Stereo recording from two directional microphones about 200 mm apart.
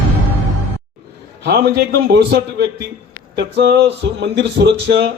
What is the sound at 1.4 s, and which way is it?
Mantra, 55° right (ahead or behind).